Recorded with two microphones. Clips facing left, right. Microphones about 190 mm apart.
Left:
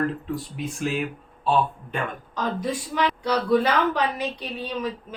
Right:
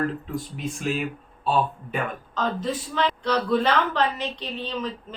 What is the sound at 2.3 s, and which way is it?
A woman's voice, 10° left (ahead or behind).